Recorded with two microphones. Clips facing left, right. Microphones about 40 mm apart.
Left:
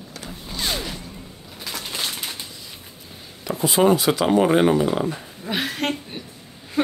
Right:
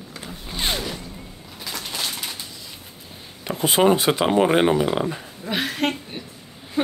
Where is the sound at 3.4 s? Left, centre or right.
Right.